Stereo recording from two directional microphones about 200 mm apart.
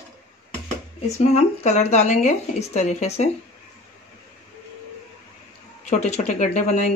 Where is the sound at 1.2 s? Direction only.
35° left (ahead or behind).